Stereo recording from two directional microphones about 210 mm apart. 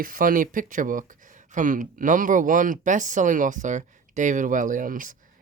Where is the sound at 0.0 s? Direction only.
40° right (ahead or behind).